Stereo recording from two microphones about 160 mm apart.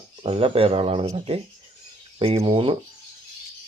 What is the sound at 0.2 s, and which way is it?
Speech, 35° right (ahead or behind).